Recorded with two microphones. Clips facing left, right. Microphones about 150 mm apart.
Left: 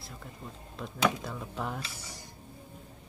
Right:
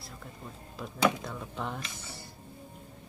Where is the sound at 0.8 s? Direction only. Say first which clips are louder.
Right 2 dB; centre (ahead or behind).